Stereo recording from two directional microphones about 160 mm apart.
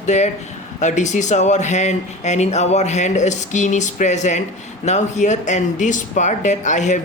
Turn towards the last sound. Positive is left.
turn(degrees=50)  # may be behind; listen again after turning